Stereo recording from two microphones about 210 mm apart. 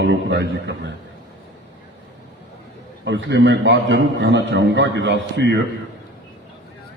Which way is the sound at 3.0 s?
55° right (ahead or behind).